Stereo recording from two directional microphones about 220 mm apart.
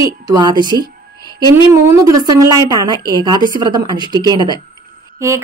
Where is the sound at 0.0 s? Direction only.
15° right (ahead or behind).